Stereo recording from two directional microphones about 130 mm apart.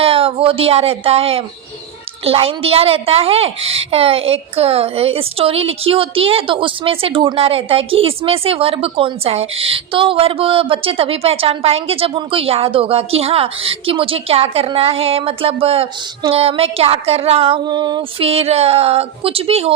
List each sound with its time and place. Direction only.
0.0 s a woman's voice: 45° right (ahead or behind)
18.3 s a woman's voice: 50° right (ahead or behind)